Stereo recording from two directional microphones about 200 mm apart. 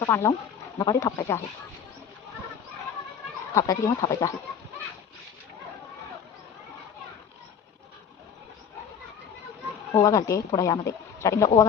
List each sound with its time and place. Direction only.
0.0 s a woman's voice: 15° left (ahead or behind)
3.5 s a woman's voice: 15° left (ahead or behind)
9.9 s a woman's voice: 20° left (ahead or behind)